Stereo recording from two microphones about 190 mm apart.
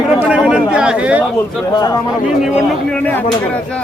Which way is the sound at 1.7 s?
20° left (ahead or behind).